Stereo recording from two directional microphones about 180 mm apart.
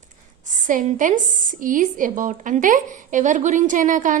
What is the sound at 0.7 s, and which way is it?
A woman's voice, 45° right (ahead or behind).